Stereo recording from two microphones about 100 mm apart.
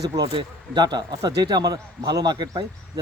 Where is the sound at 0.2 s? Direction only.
50° right (ahead or behind).